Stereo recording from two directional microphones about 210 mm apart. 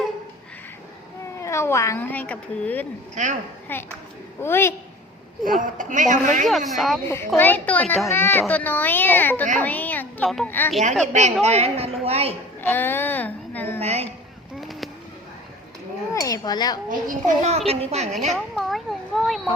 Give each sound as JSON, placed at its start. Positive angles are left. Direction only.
{"t": 1.4, "sound": "a child's voice", "side_deg": 15}
{"t": 5.5, "sound": "speech", "side_deg": -40}
{"t": 6.7, "sound": "a child's voice", "side_deg": 0}
{"t": 11.0, "sound": "a woman's voice", "side_deg": -35}
{"t": 12.6, "sound": "a woman's voice", "side_deg": 10}
{"t": 13.7, "sound": "a woman's voice", "side_deg": -30}
{"t": 14.6, "sound": "fireworks", "side_deg": 0}
{"t": 16.1, "sound": "speech", "side_deg": 15}
{"t": 16.9, "sound": "speech", "side_deg": -35}
{"t": 18.3, "sound": "a sound", "side_deg": 0}